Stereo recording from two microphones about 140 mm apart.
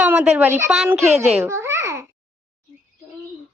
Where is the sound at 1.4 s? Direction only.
20° right (ahead or behind).